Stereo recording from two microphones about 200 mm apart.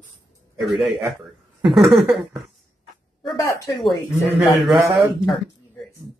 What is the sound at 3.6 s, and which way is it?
Speech, centre (ahead or behind).